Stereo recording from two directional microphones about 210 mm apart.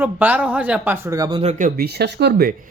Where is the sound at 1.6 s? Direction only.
50° right (ahead or behind).